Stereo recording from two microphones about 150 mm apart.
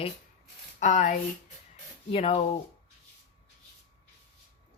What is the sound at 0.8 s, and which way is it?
Speech, 50° left (ahead or behind).